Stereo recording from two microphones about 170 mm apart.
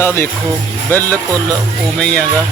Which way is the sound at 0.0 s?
15° left (ahead or behind).